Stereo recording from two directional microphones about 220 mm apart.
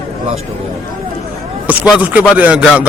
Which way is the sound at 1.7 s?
5° right (ahead or behind).